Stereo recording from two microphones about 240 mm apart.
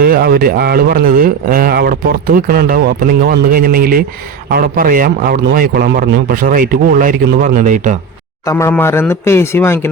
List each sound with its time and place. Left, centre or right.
0.0 s speech: right
8.4 s speech: centre